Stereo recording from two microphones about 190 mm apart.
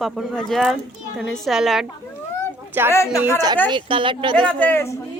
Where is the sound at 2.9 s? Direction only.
15° left (ahead or behind).